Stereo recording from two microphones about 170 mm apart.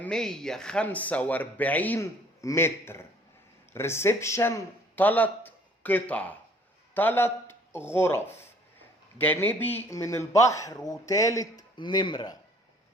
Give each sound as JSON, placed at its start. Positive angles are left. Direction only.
{"t": 0.0, "sound": "a man's voice", "side_deg": 5}